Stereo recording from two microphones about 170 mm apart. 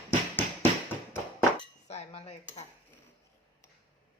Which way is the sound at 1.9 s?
40° left (ahead or behind).